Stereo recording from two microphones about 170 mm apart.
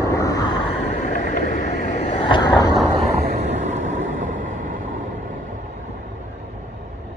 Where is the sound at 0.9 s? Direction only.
45° left (ahead or behind).